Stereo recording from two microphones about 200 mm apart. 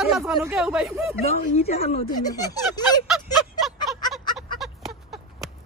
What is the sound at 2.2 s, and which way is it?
Speech, 20° left (ahead or behind).